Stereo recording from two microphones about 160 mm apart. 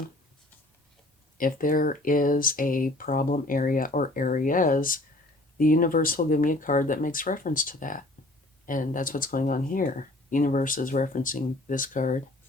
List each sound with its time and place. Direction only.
1.4 s speech: 60° left (ahead or behind)